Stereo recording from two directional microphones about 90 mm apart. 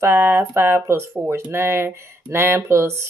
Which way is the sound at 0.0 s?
30° right (ahead or behind).